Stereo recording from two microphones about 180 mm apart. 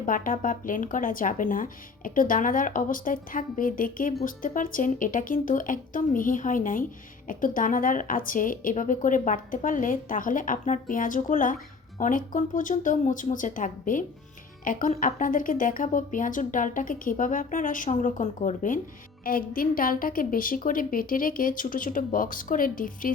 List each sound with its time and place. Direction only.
0.0 s speech: 50° left (ahead or behind)